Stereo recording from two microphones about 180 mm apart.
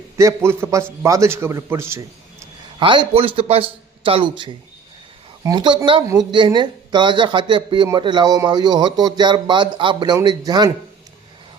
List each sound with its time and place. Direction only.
0.2 s a man's voice: 15° right (ahead or behind)